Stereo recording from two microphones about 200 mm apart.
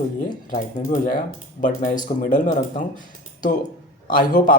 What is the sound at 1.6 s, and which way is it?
Speech, 40° left (ahead or behind).